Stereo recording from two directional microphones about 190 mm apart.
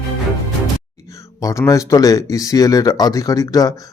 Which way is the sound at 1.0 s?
15° left (ahead or behind).